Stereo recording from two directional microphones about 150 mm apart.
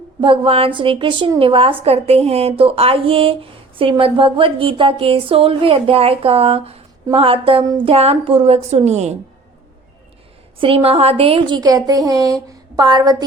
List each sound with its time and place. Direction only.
0.2 s a woman's voice: 35° right (ahead or behind)
10.6 s a woman's voice: 40° right (ahead or behind)